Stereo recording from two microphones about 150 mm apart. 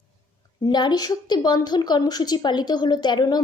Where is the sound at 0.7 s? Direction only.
30° left (ahead or behind).